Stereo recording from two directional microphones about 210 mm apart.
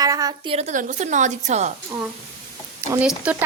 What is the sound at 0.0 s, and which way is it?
Speech, 15° right (ahead or behind).